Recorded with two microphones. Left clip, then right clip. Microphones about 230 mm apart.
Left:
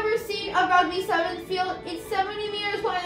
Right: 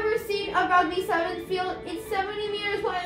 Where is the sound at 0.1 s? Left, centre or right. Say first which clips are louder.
Even; centre.